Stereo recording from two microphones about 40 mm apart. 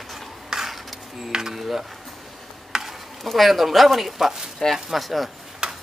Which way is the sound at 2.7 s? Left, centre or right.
Centre.